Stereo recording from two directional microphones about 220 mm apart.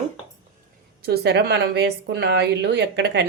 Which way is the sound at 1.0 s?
50° right (ahead or behind).